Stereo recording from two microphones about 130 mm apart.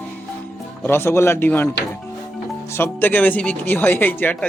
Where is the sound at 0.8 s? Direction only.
20° left (ahead or behind).